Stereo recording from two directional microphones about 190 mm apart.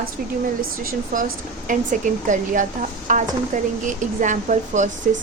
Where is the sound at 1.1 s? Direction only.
45° right (ahead or behind).